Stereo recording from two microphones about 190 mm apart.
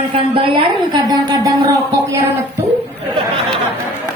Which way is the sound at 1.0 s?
20° right (ahead or behind).